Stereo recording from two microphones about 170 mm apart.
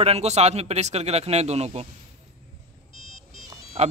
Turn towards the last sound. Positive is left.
turn(degrees=-40)  # may be behind; listen again after turning